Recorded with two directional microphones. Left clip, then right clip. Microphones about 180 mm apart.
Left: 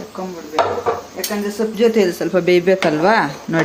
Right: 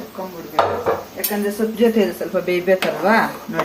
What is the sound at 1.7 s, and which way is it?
A woman's voice, 60° left (ahead or behind).